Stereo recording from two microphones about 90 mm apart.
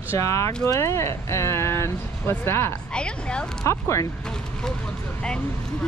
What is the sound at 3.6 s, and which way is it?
Speech, 35° left (ahead or behind).